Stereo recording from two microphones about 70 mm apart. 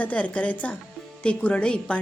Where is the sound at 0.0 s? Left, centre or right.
Centre.